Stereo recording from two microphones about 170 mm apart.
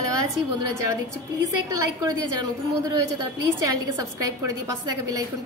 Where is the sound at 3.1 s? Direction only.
20° right (ahead or behind).